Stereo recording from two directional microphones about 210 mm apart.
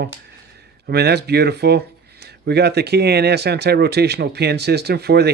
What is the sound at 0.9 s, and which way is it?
Speech, 50° right (ahead or behind).